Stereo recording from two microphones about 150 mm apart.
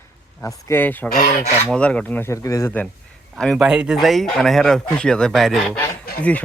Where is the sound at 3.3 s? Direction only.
Centre (ahead or behind).